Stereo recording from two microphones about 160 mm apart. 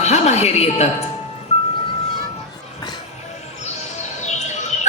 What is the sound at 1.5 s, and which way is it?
Music, 45° left (ahead or behind).